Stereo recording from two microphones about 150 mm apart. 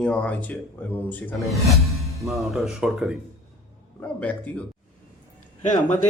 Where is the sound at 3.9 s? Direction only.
10° left (ahead or behind).